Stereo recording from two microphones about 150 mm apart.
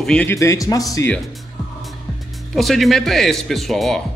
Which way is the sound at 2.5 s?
Centre (ahead or behind).